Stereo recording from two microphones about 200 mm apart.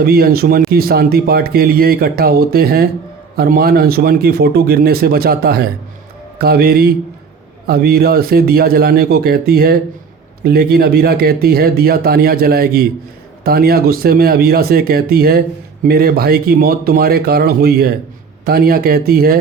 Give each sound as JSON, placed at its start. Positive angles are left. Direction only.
{"t": 0.0, "sound": "speech", "side_deg": -50}